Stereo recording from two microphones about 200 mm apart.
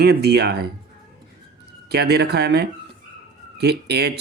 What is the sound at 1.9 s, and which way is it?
Speech, 55° right (ahead or behind).